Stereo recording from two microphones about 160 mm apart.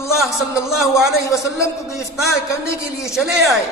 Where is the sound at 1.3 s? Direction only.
20° left (ahead or behind).